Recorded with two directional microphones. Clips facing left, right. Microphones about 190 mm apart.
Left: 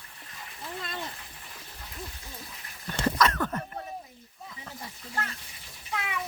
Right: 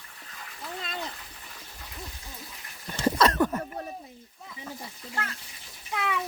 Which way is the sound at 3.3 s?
15° right (ahead or behind).